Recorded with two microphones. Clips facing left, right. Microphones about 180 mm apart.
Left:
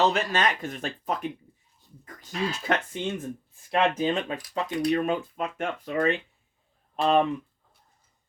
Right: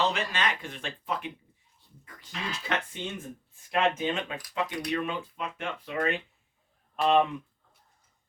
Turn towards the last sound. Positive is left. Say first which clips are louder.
# left 1 dB
turn(degrees=35)  # may be behind; listen again after turning